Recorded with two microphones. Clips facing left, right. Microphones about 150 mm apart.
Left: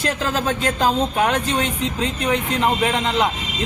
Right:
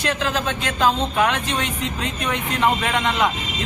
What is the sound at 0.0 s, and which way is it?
Speech, 40° left (ahead or behind).